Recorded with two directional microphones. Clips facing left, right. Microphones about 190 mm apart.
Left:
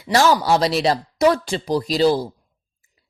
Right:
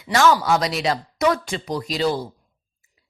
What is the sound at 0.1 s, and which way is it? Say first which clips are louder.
A woman's voice: left 1 dB; 35° left (ahead or behind).